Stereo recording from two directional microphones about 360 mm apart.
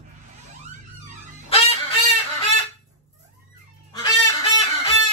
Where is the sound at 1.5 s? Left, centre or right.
Centre.